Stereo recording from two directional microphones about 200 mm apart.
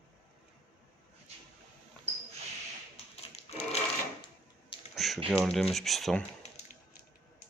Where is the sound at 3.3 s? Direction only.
30° left (ahead or behind).